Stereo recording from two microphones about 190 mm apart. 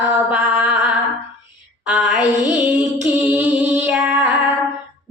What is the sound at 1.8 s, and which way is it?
Female singing, 5° right (ahead or behind).